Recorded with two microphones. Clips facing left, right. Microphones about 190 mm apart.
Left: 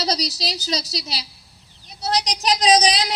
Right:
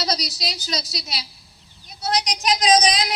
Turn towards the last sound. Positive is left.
turn(degrees=35)  # may be behind; listen again after turning